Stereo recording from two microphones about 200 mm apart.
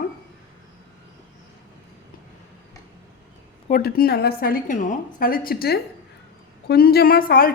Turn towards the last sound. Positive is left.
turn(degrees=45)  # may be behind; listen again after turning